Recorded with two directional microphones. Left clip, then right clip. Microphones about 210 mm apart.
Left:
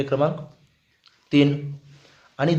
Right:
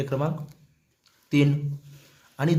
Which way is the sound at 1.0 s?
10° right (ahead or behind).